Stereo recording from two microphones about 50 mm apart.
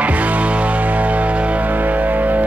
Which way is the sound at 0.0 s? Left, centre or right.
Right.